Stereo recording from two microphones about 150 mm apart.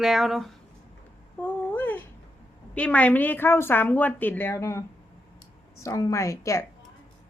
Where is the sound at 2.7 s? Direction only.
10° left (ahead or behind).